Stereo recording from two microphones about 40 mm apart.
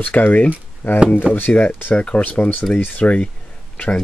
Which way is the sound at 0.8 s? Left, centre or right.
Left.